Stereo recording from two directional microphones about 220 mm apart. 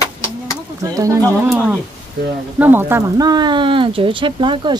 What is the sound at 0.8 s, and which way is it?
Speech, 15° right (ahead or behind).